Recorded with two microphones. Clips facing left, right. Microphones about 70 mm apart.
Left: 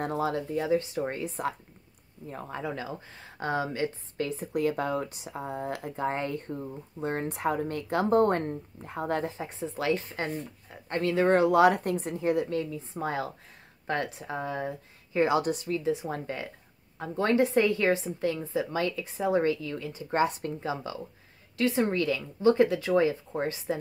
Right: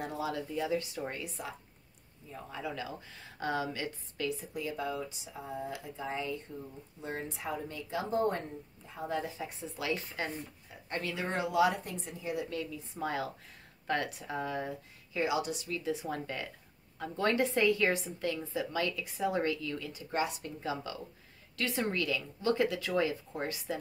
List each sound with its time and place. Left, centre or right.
0.0 s speech: left
0.4 s a woman's voice: left
2.2 s speech: left
9.4 s a woman's voice: left
12.4 s a woman's voice: left
15.2 s speech: left
15.8 s a woman's voice: left
20.6 s a woman's voice: left